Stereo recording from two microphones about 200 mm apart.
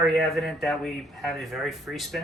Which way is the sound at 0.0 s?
Centre (ahead or behind).